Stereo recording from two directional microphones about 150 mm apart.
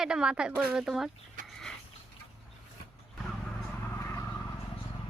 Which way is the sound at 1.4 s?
65° right (ahead or behind).